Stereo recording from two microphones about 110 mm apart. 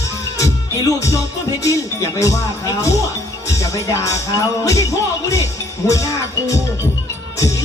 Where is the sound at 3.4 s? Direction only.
30° left (ahead or behind).